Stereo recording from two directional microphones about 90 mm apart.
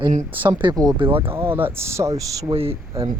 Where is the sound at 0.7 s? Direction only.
45° right (ahead or behind).